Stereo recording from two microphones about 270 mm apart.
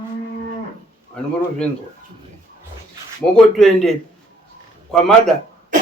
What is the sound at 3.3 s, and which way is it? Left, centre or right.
Speech, centre.